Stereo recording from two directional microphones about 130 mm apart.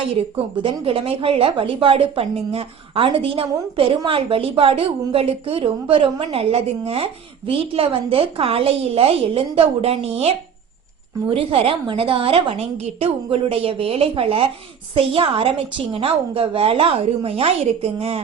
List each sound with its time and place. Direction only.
0.2 s a woman's voice: 45° right (ahead or behind)